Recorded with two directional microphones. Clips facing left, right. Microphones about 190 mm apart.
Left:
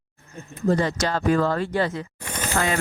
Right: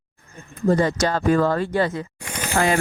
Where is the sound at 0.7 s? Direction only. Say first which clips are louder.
Right 3 dB; 45° right (ahead or behind).